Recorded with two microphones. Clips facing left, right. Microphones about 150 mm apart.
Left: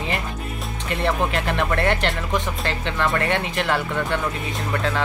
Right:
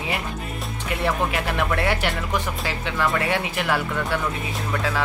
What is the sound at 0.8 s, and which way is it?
Speech, 10° right (ahead or behind).